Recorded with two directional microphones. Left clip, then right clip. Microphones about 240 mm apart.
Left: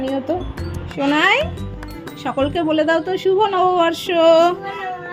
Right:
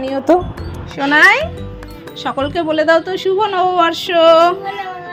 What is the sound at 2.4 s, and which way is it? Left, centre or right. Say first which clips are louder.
A woman's voice: right 1 dB; centre.